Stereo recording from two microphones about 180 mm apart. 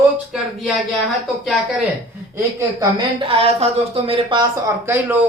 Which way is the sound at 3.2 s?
30° right (ahead or behind).